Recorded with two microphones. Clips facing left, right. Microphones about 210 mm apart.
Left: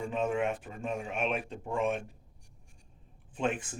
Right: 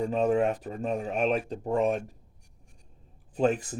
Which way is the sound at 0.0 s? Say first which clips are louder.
Right 6 dB; 35° right (ahead or behind).